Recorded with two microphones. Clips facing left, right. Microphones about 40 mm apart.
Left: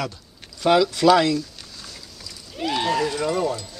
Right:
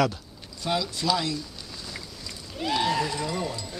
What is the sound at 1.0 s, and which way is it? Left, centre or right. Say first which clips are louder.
Speech: left 11 dB; left.